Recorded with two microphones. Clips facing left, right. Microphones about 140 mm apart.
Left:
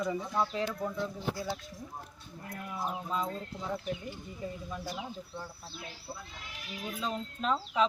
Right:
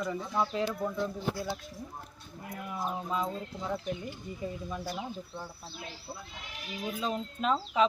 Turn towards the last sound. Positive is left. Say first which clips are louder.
# right 2 dB
turn(degrees=-5)  # may be behind; listen again after turning